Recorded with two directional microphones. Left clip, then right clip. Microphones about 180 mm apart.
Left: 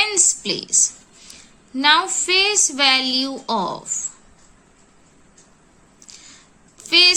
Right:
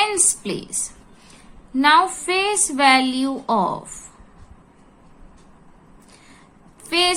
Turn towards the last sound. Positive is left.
turn(degrees=15)  # may be behind; listen again after turning